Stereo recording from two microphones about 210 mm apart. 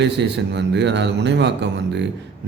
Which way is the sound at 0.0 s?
55° right (ahead or behind).